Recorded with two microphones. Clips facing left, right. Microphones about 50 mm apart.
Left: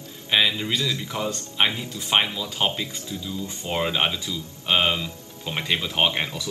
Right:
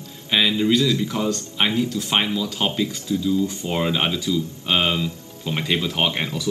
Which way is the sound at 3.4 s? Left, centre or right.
Left.